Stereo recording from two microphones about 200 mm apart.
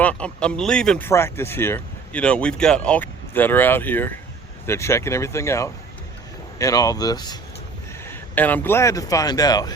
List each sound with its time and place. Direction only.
0.0 s speech: 5° left (ahead or behind)
8.0 s speech: 10° left (ahead or behind)